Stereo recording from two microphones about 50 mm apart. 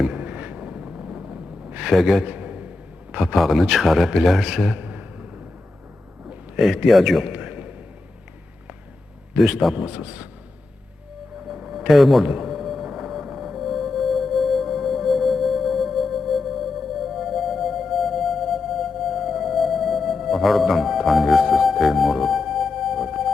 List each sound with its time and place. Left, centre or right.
0.1 s gasp: right
1.9 s speech: centre
2.2 s a sound: right
3.3 s a man's voice: centre
4.8 s a sound: right
6.8 s speech: centre
7.3 s a sound: right
9.4 s speech: centre
9.7 s a man's voice: right
11.4 s music: centre
11.9 s music: centre